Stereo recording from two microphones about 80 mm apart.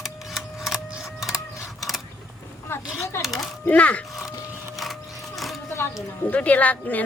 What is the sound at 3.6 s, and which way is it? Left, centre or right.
Speech, centre.